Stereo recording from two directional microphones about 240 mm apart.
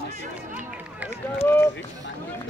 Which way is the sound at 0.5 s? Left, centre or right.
Centre.